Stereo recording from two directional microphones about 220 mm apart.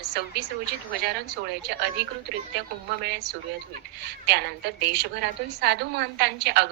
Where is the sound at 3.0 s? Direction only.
50° right (ahead or behind).